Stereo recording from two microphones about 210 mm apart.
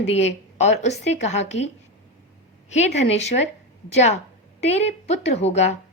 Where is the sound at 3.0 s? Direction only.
30° left (ahead or behind).